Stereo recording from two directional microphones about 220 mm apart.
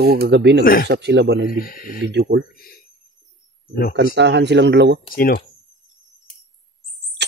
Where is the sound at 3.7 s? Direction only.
40° left (ahead or behind).